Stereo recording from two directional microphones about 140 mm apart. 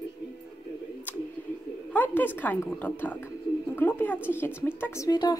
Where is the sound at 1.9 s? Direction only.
15° left (ahead or behind).